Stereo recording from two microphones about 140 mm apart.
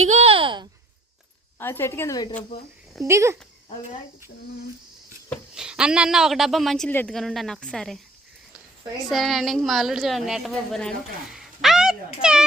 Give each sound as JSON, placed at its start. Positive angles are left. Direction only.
{"t": 0.0, "sound": "a child's voice", "side_deg": -50}
{"t": 1.5, "sound": "a woman's voice", "side_deg": 15}
{"t": 3.0, "sound": "speech", "side_deg": -20}
{"t": 5.5, "sound": "a woman's voice", "side_deg": -5}
{"t": 9.0, "sound": "a woman's voice", "side_deg": 0}